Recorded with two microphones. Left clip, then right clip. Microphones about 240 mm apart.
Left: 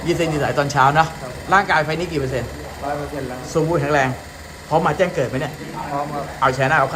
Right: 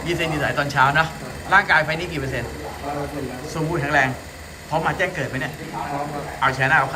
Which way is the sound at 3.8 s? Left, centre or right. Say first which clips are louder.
Left 1 dB; centre.